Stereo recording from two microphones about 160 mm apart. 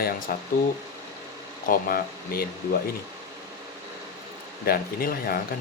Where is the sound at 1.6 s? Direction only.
65° left (ahead or behind).